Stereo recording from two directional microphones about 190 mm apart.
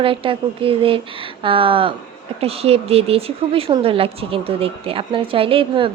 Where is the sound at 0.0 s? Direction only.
25° right (ahead or behind).